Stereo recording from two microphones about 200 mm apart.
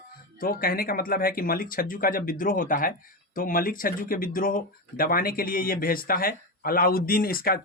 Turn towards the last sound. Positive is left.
turn(degrees=50)  # may be behind; listen again after turning